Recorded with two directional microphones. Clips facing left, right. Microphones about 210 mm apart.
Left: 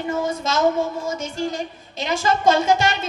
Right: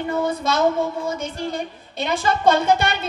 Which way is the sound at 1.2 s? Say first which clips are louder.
Left 1 dB; 60° right (ahead or behind).